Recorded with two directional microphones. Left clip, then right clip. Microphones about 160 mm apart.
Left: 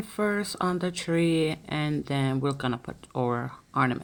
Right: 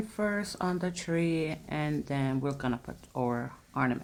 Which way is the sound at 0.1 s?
15° left (ahead or behind).